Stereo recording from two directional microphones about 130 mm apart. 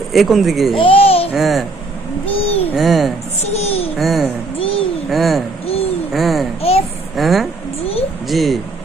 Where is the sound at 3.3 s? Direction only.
55° left (ahead or behind).